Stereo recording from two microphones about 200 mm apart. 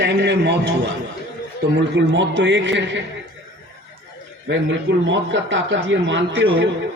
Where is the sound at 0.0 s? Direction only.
60° right (ahead or behind).